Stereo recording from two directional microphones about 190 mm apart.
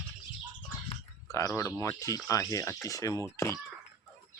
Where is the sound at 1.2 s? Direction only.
15° left (ahead or behind).